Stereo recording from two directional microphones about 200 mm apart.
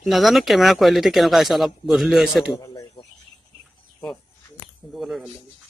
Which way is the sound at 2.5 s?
20° left (ahead or behind).